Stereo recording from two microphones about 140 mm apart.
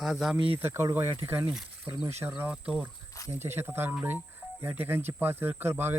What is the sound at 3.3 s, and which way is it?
Speech, 15° right (ahead or behind).